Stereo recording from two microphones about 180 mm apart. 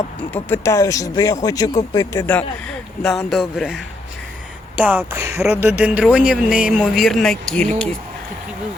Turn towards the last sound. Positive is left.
turn(degrees=5)  # may be behind; listen again after turning